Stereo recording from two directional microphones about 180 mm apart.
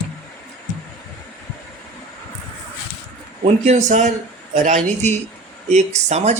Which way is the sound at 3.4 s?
40° right (ahead or behind).